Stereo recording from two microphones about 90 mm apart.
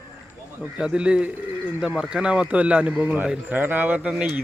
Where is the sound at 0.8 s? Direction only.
10° right (ahead or behind).